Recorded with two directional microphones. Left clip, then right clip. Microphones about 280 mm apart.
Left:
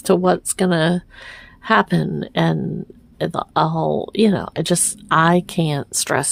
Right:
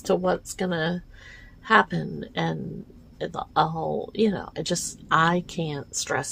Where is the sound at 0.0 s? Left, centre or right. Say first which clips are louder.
Left 7 dB; left.